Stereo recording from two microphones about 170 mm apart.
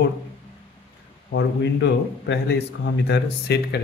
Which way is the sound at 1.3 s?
90° left.